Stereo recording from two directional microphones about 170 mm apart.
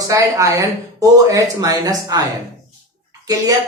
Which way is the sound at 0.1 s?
20° right (ahead or behind).